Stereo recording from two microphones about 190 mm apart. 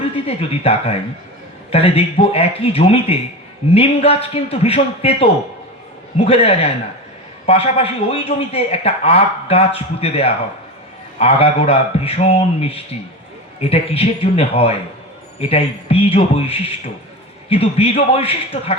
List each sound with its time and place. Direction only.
0.0 s a man's voice: 30° left (ahead or behind)